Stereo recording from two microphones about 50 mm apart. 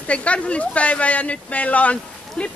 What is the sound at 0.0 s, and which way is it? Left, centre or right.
Speech, left.